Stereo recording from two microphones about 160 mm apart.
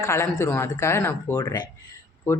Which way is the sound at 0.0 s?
20° left (ahead or behind).